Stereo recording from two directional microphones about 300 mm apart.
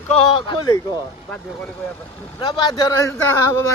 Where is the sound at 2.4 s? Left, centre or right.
Centre.